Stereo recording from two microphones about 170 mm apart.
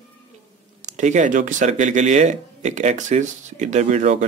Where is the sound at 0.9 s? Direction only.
45° right (ahead or behind).